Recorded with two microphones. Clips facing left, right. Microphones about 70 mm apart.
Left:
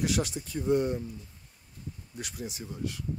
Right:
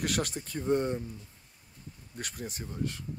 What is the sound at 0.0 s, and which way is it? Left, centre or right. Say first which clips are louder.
Speech: left 2 dB; right.